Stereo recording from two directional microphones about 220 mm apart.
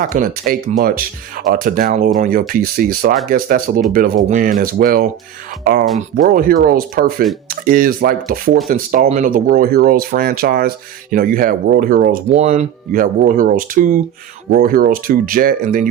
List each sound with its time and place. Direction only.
0.1 s speech: 35° right (ahead or behind)